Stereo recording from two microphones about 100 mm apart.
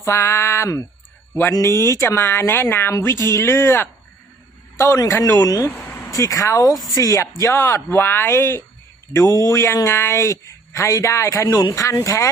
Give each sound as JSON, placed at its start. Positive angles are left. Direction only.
{"t": 0.0, "sound": "speech", "side_deg": 30}
{"t": 5.7, "sound": "a sound", "side_deg": 20}
{"t": 6.1, "sound": "speech", "side_deg": 35}